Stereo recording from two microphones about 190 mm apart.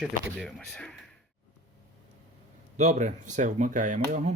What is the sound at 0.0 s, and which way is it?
Speech, centre (ahead or behind).